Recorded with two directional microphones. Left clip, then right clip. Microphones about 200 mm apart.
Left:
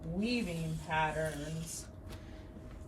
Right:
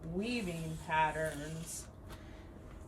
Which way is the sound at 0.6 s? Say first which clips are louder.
Right 4 dB; 15° right (ahead or behind).